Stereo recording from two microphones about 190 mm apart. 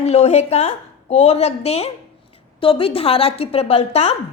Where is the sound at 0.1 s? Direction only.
35° left (ahead or behind).